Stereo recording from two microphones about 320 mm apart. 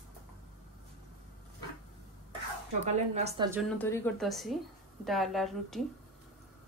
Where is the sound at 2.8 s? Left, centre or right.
Centre.